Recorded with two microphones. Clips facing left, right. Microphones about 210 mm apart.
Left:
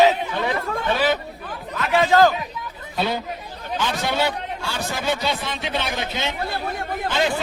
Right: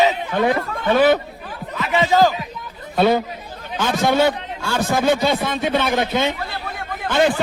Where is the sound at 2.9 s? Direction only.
55° right (ahead or behind).